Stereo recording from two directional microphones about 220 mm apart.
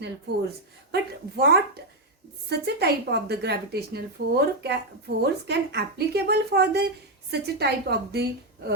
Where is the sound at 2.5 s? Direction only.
45° right (ahead or behind).